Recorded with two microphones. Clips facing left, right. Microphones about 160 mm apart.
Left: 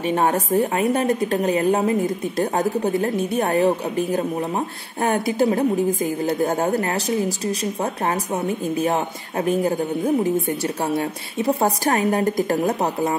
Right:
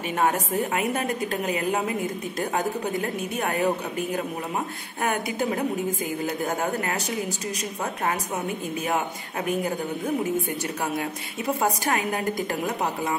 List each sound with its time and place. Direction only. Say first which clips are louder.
0.0 s a woman's voice: left 4 dB; 30° left (ahead or behind)